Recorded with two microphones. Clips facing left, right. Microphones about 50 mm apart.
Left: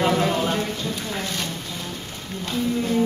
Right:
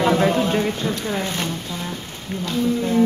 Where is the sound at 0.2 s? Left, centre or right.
Right.